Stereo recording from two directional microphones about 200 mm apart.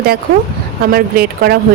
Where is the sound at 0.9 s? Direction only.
50° right (ahead or behind).